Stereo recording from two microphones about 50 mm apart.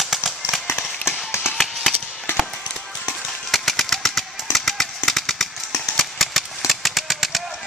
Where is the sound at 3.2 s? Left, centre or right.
Centre.